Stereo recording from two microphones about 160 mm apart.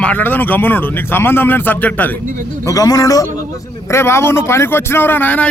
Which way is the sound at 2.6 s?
20° left (ahead or behind).